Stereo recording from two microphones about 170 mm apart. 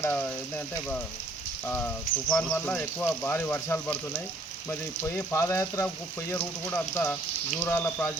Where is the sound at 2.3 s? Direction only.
10° left (ahead or behind).